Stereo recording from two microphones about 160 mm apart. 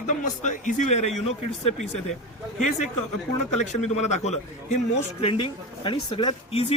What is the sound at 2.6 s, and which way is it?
A man's voice, 50° left (ahead or behind).